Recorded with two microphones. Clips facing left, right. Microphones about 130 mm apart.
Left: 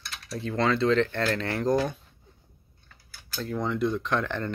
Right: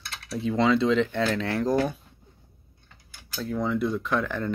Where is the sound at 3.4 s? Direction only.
5° right (ahead or behind).